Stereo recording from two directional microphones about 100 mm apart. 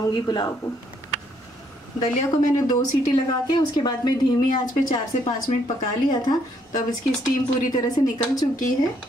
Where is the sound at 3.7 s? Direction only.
45° left (ahead or behind).